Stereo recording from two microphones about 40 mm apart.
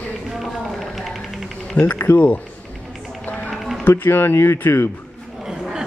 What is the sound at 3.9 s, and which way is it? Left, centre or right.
Speech, left.